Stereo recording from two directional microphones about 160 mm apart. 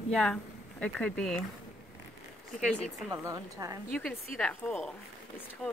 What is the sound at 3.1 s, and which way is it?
Speech, 20° right (ahead or behind).